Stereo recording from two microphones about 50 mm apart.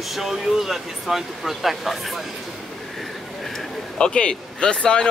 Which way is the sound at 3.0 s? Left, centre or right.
Centre.